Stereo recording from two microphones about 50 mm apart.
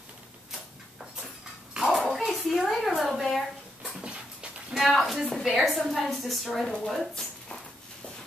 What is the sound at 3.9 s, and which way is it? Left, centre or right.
Dog, centre.